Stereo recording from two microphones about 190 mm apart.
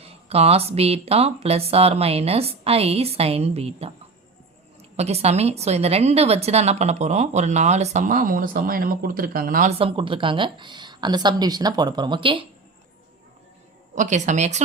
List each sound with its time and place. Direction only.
0.0 s a woman's voice: 30° right (ahead or behind)
4.9 s a woman's voice: 35° right (ahead or behind)
9.7 s a woman's voice: 30° right (ahead or behind)
13.9 s a woman's voice: 40° right (ahead or behind)